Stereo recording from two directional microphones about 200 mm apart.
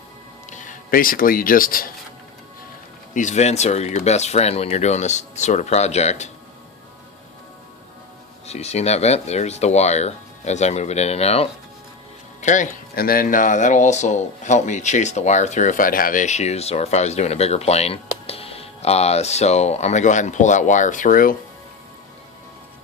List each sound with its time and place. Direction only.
0.5 s speech: 40° left (ahead or behind)
3.2 s speech: 35° left (ahead or behind)
8.4 s speech: 35° left (ahead or behind)